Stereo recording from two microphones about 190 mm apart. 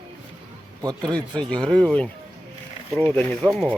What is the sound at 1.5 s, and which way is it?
Speech, 5° left (ahead or behind).